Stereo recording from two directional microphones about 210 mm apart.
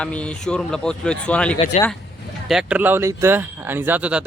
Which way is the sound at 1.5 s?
30° left (ahead or behind).